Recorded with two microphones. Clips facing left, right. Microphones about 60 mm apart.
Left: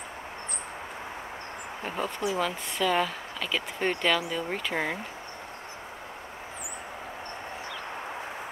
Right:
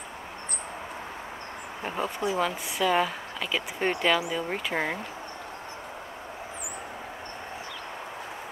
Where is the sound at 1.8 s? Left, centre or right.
Centre.